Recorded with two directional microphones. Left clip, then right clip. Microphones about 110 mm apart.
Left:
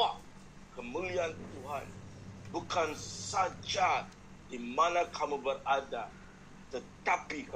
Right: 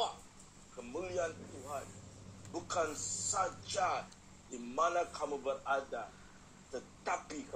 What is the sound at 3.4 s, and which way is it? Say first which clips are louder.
Speech: left 5 dB; 20° right (ahead or behind).